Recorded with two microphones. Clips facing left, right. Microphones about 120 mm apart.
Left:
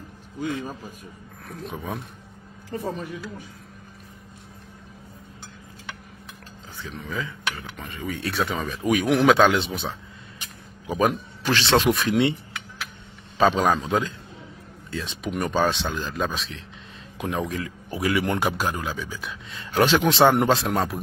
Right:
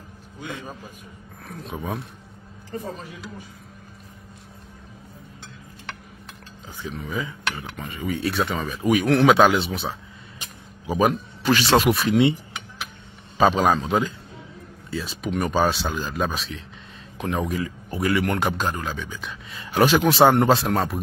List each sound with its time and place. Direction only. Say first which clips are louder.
1.6 s speech: right 2 dB; centre (ahead or behind)
7.1 s speech: right 1 dB; 15° right (ahead or behind)
7.4 s speech: right 2 dB; centre (ahead or behind)
13.4 s speech: right 1 dB; 10° right (ahead or behind)
19.7 s speech: right 1 dB; 10° right (ahead or behind)